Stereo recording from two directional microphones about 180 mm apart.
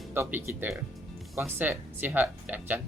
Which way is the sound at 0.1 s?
10° right (ahead or behind).